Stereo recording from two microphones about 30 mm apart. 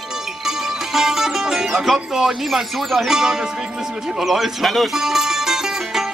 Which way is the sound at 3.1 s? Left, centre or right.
Right.